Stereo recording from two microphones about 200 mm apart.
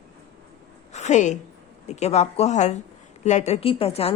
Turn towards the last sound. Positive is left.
turn(degrees=30)  # may be behind; listen again after turning